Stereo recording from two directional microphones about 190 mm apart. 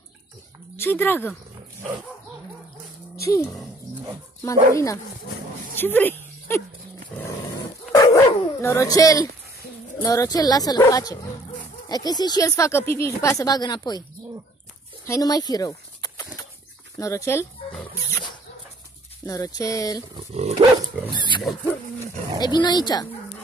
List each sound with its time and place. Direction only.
0.7 s speech: 10° left (ahead or behind)
3.2 s a sound: 15° left (ahead or behind)
4.4 s speech: 15° left (ahead or behind)
5.8 s a sound: 10° left (ahead or behind)
7.2 s dog: 15° left (ahead or behind)
9.9 s speech: 15° left (ahead or behind)
15.0 s speech: 20° left (ahead or behind)
19.2 s speech: 20° left (ahead or behind)
20.3 s dog: 35° right (ahead or behind)
21.1 s speech: 25° left (ahead or behind)
22.4 s speech: 20° left (ahead or behind)